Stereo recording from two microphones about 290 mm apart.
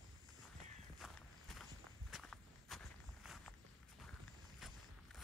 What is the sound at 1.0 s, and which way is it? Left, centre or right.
Walk, centre.